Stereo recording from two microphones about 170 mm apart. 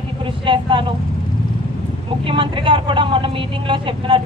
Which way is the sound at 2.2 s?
30° right (ahead or behind).